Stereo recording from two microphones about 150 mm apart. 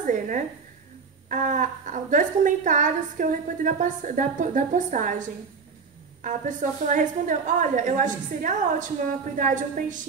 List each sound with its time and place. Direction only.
0.0 s a woman's voice: 60° right (ahead or behind)
6.2 s a woman's voice: 55° right (ahead or behind)